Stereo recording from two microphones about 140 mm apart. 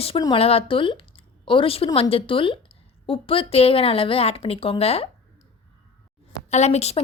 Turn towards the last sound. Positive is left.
turn(degrees=50)  # may be behind; listen again after turning